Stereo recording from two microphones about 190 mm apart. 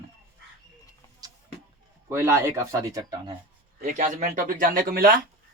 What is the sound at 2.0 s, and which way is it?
Speech, 15° right (ahead or behind).